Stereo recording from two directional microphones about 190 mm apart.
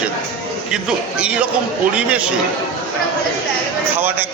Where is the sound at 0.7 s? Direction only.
5° right (ahead or behind).